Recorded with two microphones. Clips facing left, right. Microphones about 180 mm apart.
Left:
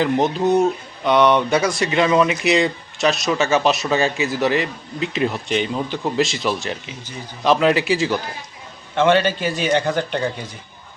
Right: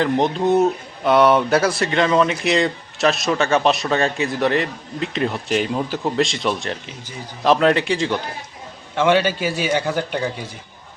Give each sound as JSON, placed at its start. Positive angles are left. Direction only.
{"t": 0.0, "sound": "speech", "side_deg": 0}
{"t": 9.0, "sound": "a man's voice", "side_deg": -10}